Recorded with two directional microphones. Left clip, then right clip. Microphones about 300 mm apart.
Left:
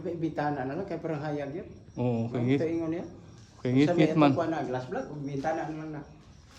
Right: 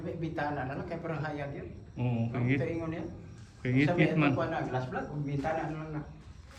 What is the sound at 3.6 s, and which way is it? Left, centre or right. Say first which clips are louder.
A man's voice: left 4 dB; centre.